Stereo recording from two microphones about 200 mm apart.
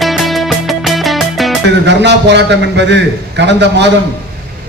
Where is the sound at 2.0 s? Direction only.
60° right (ahead or behind).